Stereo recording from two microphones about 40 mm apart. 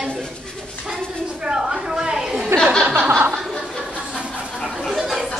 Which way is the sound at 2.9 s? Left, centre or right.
Right.